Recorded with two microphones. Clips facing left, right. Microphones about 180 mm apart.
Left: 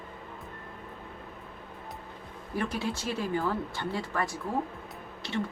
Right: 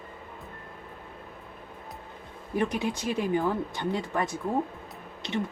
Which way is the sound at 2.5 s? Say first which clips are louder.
Right 4 dB; 20° right (ahead or behind).